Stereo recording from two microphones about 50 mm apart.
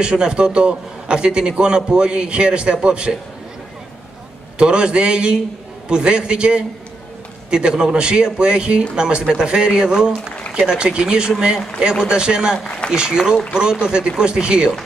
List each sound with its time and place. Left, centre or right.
0.0 s a man's voice: centre
4.6 s a man's voice: centre